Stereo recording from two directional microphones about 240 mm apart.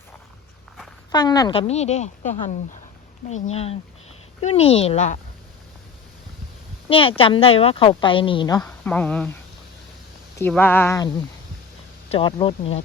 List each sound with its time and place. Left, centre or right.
1.1 s a woman's voice: centre
6.8 s a woman's voice: left
8.6 s a woman's voice: centre
10.3 s a woman's voice: centre; by 12.8 s left